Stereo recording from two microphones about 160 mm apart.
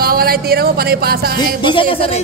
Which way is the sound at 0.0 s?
70° right (ahead or behind).